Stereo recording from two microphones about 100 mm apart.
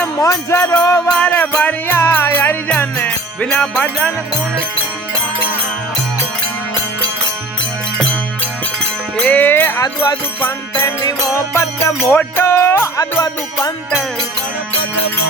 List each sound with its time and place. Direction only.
0.2 s music: 35° left (ahead or behind)
1.2 s music: 15° left (ahead or behind)
9.1 s music: 15° left (ahead or behind)
9.8 s music: 40° left (ahead or behind)
10.4 s music: 25° left (ahead or behind)
13.0 s music: 35° left (ahead or behind)